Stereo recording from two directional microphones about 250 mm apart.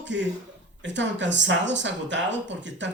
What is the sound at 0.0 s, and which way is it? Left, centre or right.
Speech, right.